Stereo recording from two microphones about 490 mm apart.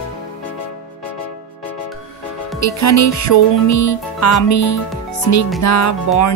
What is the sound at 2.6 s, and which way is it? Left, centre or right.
Music, left.